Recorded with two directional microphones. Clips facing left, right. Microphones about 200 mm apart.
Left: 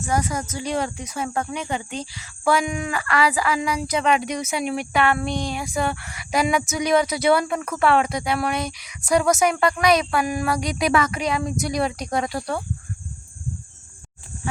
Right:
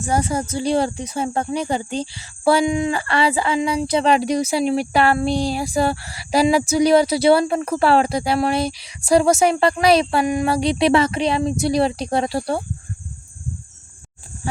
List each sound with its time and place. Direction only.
0.0 s speech: 30° right (ahead or behind)
14.4 s speech: 35° right (ahead or behind)